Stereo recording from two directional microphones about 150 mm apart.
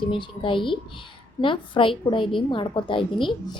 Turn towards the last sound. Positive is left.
turn(degrees=35)  # may be behind; listen again after turning